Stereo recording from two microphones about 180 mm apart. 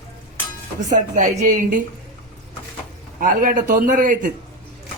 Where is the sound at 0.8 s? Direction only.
40° right (ahead or behind).